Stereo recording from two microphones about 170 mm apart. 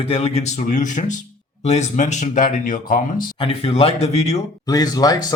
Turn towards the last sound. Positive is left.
turn(degrees=20)  # may be behind; listen again after turning